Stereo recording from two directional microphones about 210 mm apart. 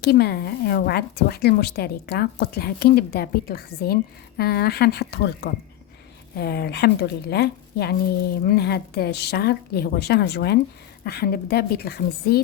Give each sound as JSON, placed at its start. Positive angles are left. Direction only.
{"t": 0.0, "sound": "a woman's voice", "side_deg": 50}